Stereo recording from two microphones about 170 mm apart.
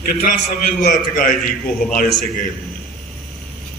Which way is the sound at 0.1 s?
60° left (ahead or behind).